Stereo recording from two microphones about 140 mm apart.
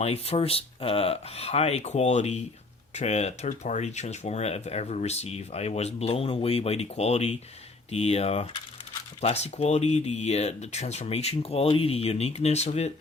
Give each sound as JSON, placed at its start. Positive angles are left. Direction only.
{"t": 0.0, "sound": "speech", "side_deg": 45}